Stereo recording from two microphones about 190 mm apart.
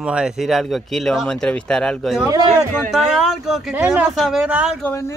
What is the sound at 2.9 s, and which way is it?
A man's voice, centre (ahead or behind).